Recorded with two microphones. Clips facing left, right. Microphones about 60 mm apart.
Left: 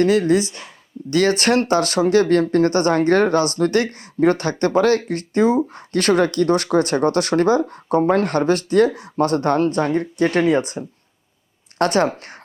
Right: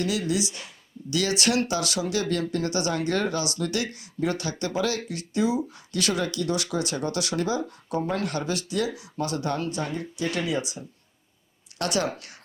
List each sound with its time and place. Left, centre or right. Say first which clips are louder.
0.0 s speech: left 11 dB; left